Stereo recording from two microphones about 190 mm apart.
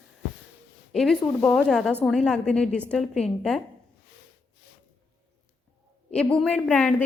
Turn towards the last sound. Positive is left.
turn(degrees=5)  # may be behind; listen again after turning